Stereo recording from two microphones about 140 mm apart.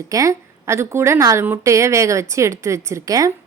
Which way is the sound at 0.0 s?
25° right (ahead or behind).